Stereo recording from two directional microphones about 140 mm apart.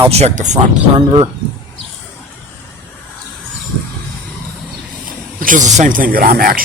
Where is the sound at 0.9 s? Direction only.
40° right (ahead or behind).